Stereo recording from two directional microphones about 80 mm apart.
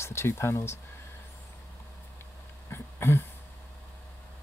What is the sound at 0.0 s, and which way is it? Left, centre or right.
Speech, left.